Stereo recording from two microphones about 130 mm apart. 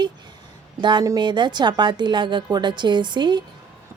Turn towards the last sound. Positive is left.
turn(degrees=-35)  # may be behind; listen again after turning